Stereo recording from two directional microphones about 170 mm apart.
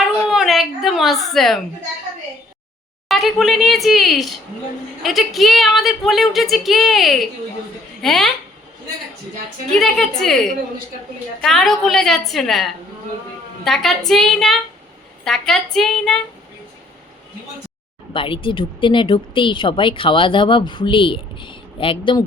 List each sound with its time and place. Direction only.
0.0 s a sound: centre (ahead or behind)
3.1 s speech: centre (ahead or behind)
9.6 s speech: 5° left (ahead or behind)
18.1 s speech: 30° left (ahead or behind)